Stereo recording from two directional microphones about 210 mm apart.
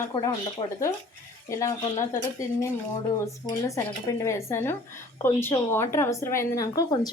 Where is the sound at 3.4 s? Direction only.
15° left (ahead or behind).